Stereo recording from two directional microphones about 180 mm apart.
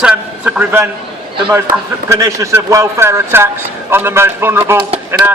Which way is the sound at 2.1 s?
15° right (ahead or behind).